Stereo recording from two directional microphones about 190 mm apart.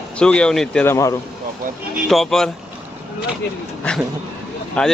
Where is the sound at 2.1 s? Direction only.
Centre (ahead or behind).